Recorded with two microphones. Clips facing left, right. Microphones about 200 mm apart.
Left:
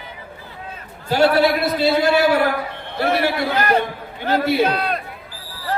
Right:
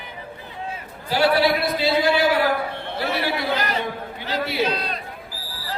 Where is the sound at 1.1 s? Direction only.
45° left (ahead or behind).